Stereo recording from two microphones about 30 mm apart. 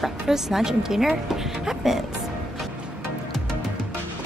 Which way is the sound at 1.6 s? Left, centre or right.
Centre.